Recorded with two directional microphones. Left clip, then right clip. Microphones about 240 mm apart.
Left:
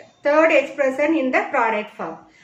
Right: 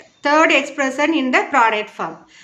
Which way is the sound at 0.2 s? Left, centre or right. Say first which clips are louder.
Right 1 dB; right.